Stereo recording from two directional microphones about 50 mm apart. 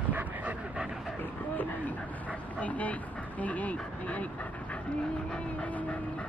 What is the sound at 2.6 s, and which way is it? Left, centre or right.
Vehicle, left.